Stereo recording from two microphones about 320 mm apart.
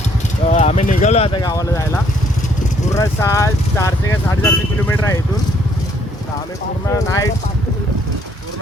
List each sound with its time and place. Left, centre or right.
0.5 s speech: centre
6.9 s speech: centre